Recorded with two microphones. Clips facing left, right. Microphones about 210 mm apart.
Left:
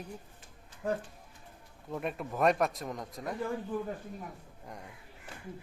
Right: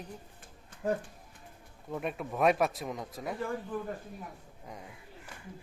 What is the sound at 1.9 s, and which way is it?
Speech, centre (ahead or behind).